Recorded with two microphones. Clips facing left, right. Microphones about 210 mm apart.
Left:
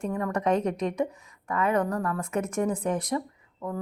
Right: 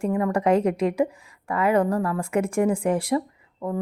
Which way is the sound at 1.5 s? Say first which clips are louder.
Right 5 dB; 30° right (ahead or behind).